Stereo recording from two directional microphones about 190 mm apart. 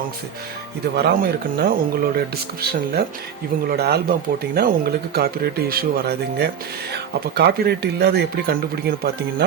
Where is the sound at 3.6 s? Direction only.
55° right (ahead or behind).